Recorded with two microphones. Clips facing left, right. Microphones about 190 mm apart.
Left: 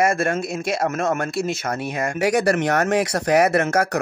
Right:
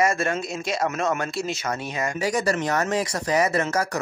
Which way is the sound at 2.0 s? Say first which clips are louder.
Left 5 dB; 65° left (ahead or behind).